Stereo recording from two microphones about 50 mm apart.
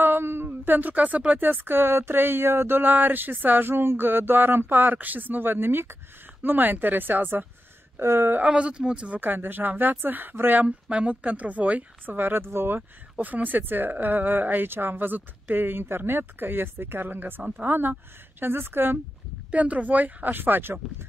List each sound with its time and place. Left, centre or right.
0.0 s a sound: right
0.5 s speech: right
1.4 s a woman's voice: right
8.0 s speech: right
8.5 s speech: right
9.2 s a woman's voice: right
10.6 s a woman's voice: right
13.2 s a woman's voice: right
19.5 s a woman's voice: right